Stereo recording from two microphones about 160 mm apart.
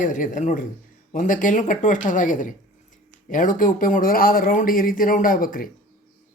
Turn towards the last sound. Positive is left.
turn(degrees=60)  # may be behind; listen again after turning